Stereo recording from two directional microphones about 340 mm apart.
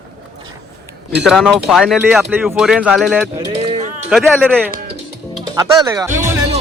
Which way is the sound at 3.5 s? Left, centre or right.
Centre.